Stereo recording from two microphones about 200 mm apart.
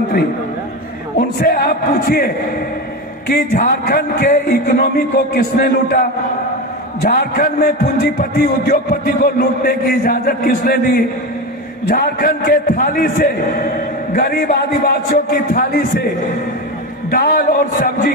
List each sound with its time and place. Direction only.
1.1 s speech: 50° left (ahead or behind)
7.1 s speech: 45° left (ahead or behind)
17.1 s speech: 45° left (ahead or behind)